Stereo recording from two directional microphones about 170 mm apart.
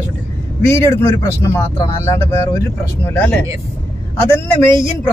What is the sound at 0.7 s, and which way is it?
Speech, 15° left (ahead or behind).